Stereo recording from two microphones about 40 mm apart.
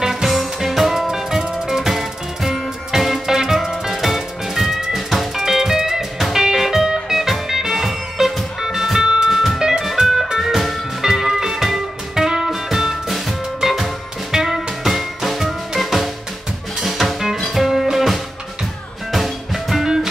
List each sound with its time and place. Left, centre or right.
0.0 s music: centre
9.6 s music: centre